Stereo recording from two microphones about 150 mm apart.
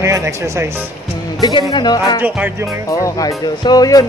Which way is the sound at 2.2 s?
10° right (ahead or behind).